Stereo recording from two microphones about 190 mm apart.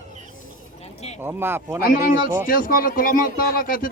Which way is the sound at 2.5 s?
45° left (ahead or behind).